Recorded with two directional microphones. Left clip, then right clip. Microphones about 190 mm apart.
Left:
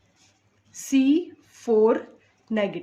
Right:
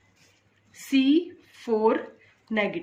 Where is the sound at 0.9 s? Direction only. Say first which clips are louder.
Left 1 dB; 50° left (ahead or behind).